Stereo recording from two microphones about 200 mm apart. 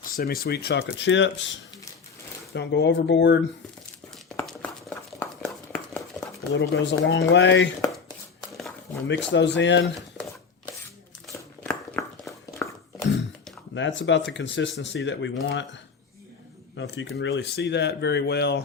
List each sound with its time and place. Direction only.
0.0 s speech: 50° left (ahead or behind); by 1.5 s 65° left (ahead or behind)
2.5 s speech: 60° left (ahead or behind)
4.4 s a sound: 5° left (ahead or behind)
6.5 s speech: 65° left (ahead or behind)
9.0 s speech: 65° left (ahead or behind)
11.3 s crumpling: 10° left (ahead or behind)
12.5 s a sound: 15° left (ahead or behind)
13.7 s speech: 65° left (ahead or behind)